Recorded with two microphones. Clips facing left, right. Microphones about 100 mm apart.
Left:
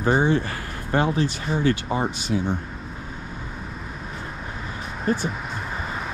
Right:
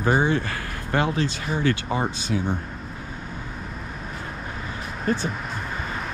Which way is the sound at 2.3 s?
30° left (ahead or behind).